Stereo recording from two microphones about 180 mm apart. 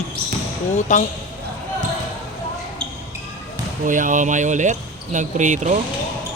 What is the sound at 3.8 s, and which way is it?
Speech, 45° right (ahead or behind).